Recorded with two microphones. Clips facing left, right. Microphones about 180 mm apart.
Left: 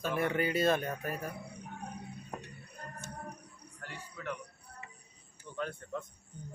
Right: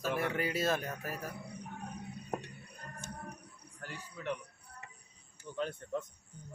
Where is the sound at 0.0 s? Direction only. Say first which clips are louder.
Left 2 dB; centre (ahead or behind).